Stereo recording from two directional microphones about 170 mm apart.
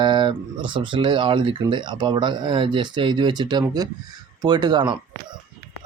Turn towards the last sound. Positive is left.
turn(degrees=-25)  # may be behind; listen again after turning